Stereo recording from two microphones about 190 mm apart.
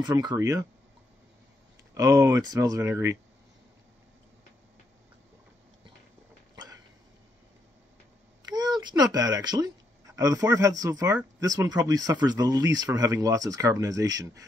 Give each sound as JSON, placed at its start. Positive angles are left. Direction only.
{"t": 0.0, "sound": "speech", "side_deg": -20}
{"t": 2.0, "sound": "speech", "side_deg": -15}
{"t": 6.5, "sound": "dog", "side_deg": -20}
{"t": 8.4, "sound": "speech", "side_deg": -20}